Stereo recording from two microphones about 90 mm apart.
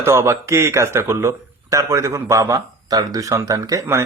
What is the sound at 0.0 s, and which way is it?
Speech, 30° right (ahead or behind).